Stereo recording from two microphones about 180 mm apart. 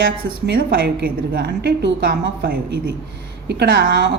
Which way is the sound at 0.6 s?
60° right (ahead or behind).